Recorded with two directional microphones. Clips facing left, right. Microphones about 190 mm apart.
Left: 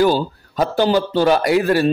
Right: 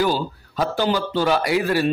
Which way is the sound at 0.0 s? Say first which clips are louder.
Left 5 dB; 45° left (ahead or behind).